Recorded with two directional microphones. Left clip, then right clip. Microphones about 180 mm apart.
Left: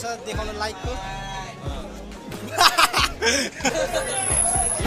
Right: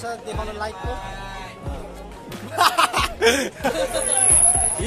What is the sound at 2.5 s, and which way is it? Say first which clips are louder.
Music: even; 5° right (ahead or behind).